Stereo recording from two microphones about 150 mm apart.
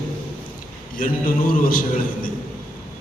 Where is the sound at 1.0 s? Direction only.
70° left (ahead or behind).